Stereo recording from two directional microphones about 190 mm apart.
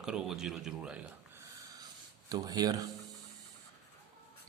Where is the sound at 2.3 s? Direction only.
20° right (ahead or behind).